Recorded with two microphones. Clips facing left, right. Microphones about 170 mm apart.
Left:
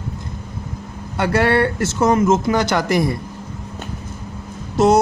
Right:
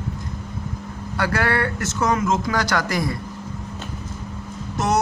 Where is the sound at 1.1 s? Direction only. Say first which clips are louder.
Left 6 dB; 25° left (ahead or behind).